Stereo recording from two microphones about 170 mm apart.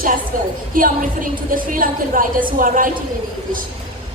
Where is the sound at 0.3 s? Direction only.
55° right (ahead or behind).